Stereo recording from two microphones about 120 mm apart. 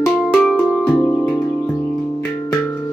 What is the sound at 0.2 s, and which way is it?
Music, centre (ahead or behind).